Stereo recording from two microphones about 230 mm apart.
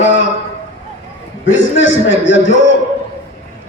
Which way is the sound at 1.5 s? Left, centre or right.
Left.